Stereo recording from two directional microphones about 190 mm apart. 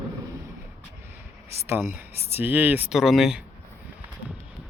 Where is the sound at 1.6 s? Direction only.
15° right (ahead or behind).